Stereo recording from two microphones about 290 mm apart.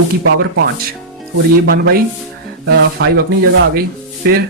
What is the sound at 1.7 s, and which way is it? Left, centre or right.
Speech, right.